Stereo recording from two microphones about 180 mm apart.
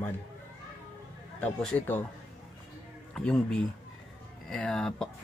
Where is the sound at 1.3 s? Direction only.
10° left (ahead or behind).